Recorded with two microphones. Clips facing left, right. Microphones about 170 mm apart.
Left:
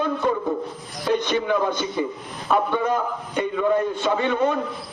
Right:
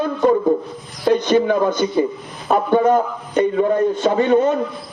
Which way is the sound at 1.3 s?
45° right (ahead or behind).